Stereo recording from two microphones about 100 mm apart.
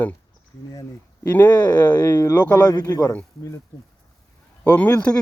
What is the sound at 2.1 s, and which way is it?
Speech, 40° left (ahead or behind).